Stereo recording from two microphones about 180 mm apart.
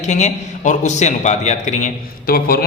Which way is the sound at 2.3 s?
55° left (ahead or behind).